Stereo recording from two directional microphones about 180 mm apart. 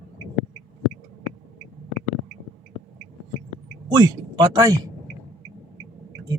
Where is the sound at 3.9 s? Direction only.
20° right (ahead or behind).